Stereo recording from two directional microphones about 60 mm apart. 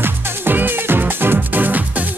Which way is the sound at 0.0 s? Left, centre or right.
Right.